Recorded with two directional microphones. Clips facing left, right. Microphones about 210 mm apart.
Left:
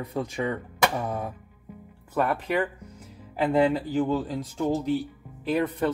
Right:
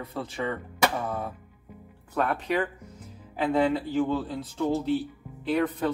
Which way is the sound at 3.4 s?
10° left (ahead or behind).